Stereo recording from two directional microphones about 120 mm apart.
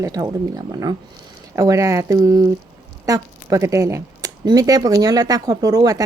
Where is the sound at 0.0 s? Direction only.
30° right (ahead or behind).